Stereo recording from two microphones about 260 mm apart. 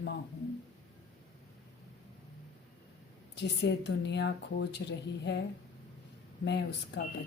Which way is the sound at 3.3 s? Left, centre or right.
Left.